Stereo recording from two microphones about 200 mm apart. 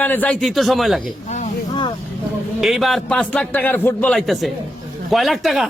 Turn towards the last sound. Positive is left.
turn(degrees=0)  # may be behind; listen again after turning